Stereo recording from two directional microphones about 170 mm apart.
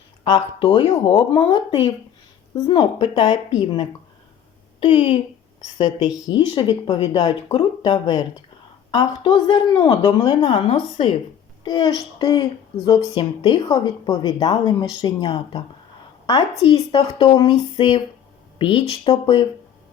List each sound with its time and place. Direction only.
0.3 s a woman's voice: 25° left (ahead or behind)
6.0 s speech: 5° right (ahead or behind)
6.2 s speech: 90° left
6.5 s a woman's voice: 25° left (ahead or behind)
16.7 s a woman's voice: 20° left (ahead or behind)